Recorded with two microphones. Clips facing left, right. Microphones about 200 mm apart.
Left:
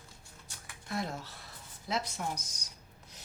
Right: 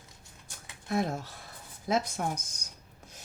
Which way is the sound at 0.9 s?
50° right (ahead or behind).